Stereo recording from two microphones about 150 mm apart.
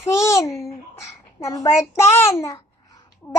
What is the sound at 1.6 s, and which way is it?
A child's voice, 20° left (ahead or behind).